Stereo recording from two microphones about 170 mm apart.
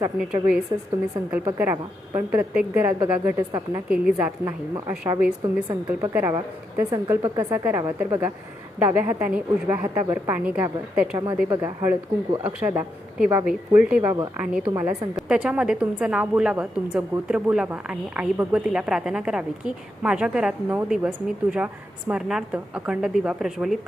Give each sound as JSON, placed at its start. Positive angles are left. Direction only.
{"t": 0.2, "sound": "a woman's voice", "side_deg": -5}
{"t": 3.8, "sound": "a woman's voice", "side_deg": -5}